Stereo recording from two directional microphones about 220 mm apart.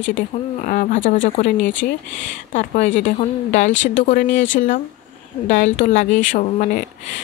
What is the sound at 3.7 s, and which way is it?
Speech, 55° left (ahead or behind).